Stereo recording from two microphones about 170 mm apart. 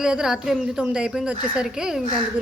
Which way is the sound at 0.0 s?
5° right (ahead or behind).